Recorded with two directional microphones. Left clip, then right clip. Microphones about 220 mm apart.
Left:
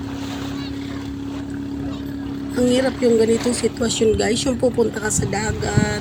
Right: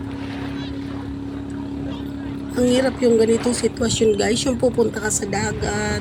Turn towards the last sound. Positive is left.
turn(degrees=0)  # may be behind; listen again after turning